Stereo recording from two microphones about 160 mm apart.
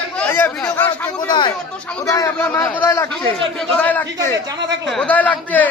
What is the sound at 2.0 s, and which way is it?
A man's voice, 20° left (ahead or behind).